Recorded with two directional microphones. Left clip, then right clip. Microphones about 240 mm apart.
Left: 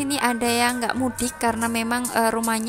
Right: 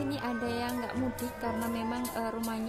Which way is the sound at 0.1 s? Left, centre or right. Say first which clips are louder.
Left 12 dB; left.